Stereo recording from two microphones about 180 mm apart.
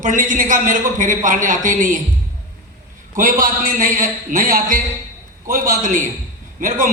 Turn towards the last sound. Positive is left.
turn(degrees=-45)  # may be behind; listen again after turning